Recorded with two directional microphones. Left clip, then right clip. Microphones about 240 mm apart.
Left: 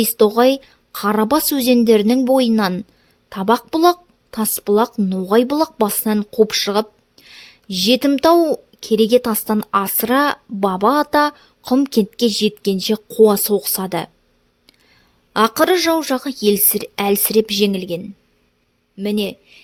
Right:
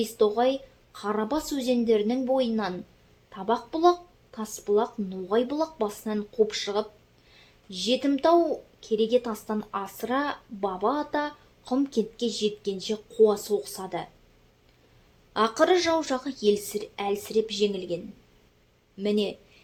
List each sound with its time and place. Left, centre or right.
0.0 s a woman's voice: left
15.3 s a woman's voice: left